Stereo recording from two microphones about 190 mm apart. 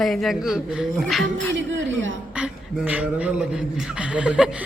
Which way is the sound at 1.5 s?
80° right.